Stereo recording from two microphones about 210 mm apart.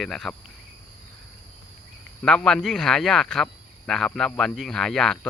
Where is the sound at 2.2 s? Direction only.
5° left (ahead or behind).